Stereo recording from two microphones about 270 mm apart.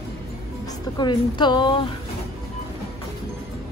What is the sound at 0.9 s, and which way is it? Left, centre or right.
Speech, centre.